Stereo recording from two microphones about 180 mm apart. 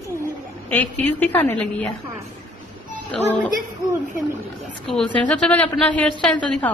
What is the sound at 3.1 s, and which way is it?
Speech, 5° left (ahead or behind).